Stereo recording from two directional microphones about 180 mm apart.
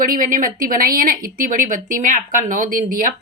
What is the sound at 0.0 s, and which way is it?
Speech, 50° right (ahead or behind).